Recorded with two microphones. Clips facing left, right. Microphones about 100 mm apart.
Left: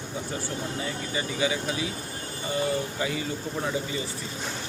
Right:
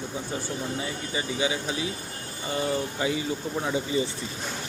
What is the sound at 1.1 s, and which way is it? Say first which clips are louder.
Speech: even; 20° right (ahead or behind).